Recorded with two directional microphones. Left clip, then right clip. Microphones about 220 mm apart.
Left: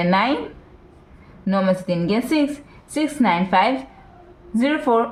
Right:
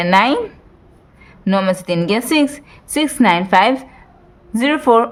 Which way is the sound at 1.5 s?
35° right (ahead or behind).